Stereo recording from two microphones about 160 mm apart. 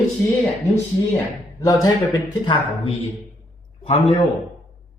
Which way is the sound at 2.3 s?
30° left (ahead or behind).